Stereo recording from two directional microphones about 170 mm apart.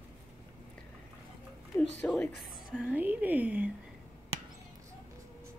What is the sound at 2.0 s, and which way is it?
A woman's voice, 5° left (ahead or behind).